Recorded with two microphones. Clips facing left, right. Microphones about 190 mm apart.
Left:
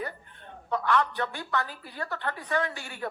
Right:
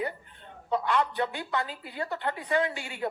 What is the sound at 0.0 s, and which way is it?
A woman's voice, 20° right (ahead or behind).